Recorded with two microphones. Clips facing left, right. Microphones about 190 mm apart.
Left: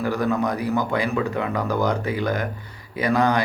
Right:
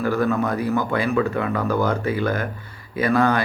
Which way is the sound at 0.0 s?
15° left (ahead or behind).